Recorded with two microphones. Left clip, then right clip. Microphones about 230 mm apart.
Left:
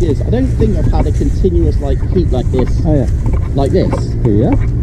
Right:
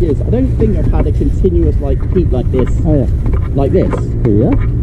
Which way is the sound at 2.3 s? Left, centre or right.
Left.